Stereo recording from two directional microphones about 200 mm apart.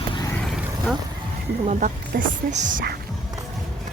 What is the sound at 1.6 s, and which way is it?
Speech, 40° right (ahead or behind).